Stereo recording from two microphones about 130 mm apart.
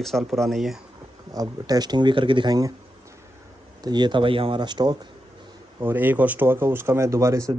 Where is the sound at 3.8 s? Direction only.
35° right (ahead or behind).